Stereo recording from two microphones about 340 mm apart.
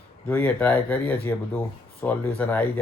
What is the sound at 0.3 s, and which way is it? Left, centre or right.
Speech, centre.